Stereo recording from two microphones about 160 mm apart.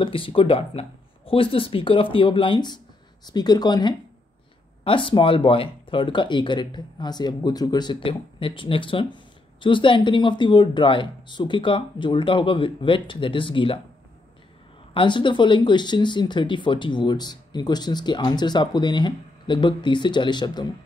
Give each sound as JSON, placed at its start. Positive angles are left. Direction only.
{"t": 0.0, "sound": "speech", "side_deg": 35}
{"t": 15.0, "sound": "speech", "side_deg": 30}